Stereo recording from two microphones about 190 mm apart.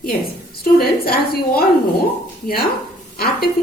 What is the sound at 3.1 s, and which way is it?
Speech, 55° left (ahead or behind).